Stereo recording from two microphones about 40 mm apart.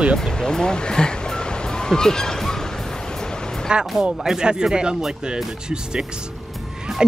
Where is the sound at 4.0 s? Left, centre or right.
Centre.